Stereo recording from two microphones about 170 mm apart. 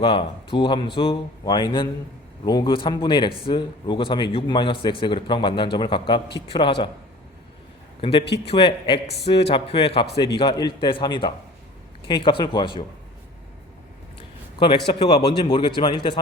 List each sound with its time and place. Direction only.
0.0 s speech: 30° left (ahead or behind)
8.4 s a man's voice: 35° left (ahead or behind)
14.9 s speech: 25° left (ahead or behind)